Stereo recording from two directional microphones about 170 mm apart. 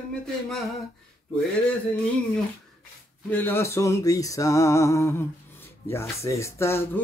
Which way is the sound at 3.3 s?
10° left (ahead or behind).